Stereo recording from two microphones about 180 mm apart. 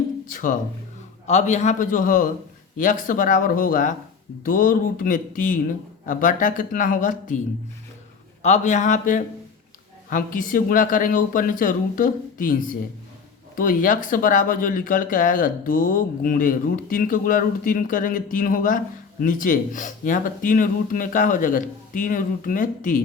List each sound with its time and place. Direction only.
0.3 s speech: 50° left (ahead or behind)
8.4 s speech: 40° left (ahead or behind)